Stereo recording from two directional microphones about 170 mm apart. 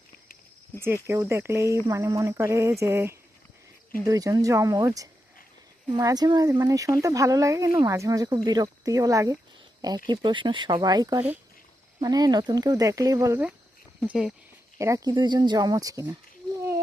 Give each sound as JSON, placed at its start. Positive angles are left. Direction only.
{"t": 1.0, "sound": "speech", "side_deg": -15}
{"t": 14.1, "sound": "speech", "side_deg": -5}
{"t": 14.8, "sound": "speech", "side_deg": -20}